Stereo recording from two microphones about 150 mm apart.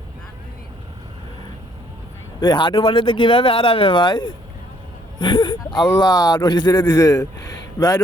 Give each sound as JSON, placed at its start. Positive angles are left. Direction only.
{"t": 2.4, "sound": "speech", "side_deg": 30}